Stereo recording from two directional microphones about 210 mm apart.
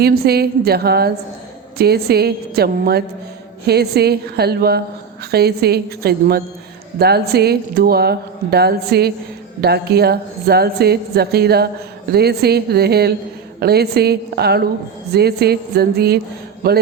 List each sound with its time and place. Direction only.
0.0 s speech: 50° right (ahead or behind)